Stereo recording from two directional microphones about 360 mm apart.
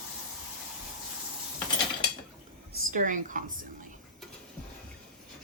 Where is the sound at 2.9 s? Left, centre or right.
Right.